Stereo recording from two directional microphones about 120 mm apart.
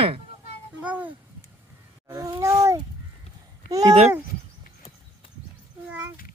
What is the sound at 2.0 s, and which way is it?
Speech, 30° right (ahead or behind).